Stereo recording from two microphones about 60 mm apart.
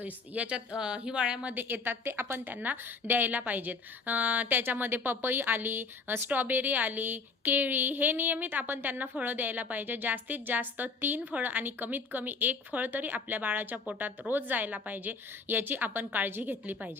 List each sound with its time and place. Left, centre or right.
0.0 s a woman's voice: right
1.5 s a woman's voice: right